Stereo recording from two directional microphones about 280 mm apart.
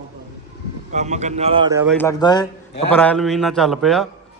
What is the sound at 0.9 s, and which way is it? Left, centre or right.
Speech, right.